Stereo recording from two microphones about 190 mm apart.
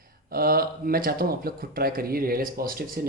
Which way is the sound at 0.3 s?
50° right (ahead or behind).